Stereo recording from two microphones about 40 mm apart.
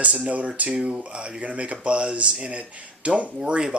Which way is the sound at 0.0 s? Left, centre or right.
Right.